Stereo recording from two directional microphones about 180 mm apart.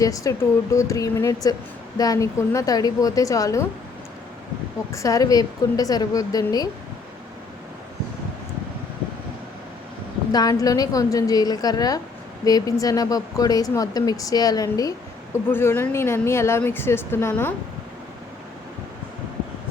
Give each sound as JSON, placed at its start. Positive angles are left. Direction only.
{"t": 0.0, "sound": "speech", "side_deg": 20}
{"t": 4.9, "sound": "speech", "side_deg": 20}
{"t": 10.3, "sound": "speech", "side_deg": 20}